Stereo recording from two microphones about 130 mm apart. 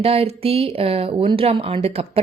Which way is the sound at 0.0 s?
50° right (ahead or behind).